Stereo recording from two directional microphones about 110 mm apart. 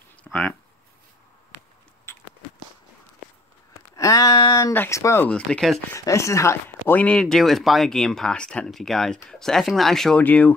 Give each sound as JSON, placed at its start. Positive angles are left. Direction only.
{"t": 0.2, "sound": "speech", "side_deg": 15}
{"t": 3.9, "sound": "a sound", "side_deg": 30}
{"t": 4.7, "sound": "speech", "side_deg": 25}
{"t": 5.2, "sound": "speech", "side_deg": 10}
{"t": 5.9, "sound": "speech", "side_deg": 30}
{"t": 7.0, "sound": "speech", "side_deg": 10}
{"t": 10.2, "sound": "speech", "side_deg": 15}